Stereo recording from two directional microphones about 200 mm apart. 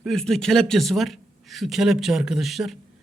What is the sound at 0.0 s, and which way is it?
A man's voice, centre (ahead or behind).